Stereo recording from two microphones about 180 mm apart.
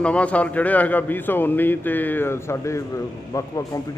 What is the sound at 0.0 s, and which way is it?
A man's voice, 5° left (ahead or behind).